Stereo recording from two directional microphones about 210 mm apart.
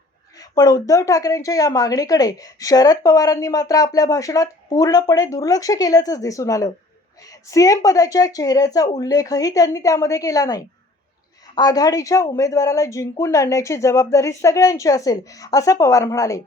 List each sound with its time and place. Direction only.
0.3 s a woman's voice: 15° left (ahead or behind)